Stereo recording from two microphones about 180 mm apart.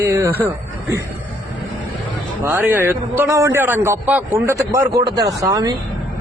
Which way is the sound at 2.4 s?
10° right (ahead or behind).